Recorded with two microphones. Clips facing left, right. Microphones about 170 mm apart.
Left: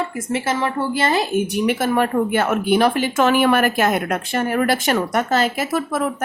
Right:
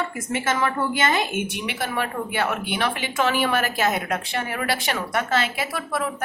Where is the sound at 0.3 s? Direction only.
30° left (ahead or behind).